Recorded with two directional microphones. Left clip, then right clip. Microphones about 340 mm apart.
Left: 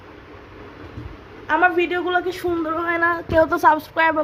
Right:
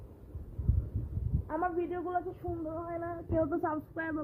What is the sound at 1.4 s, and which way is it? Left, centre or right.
Speech, centre.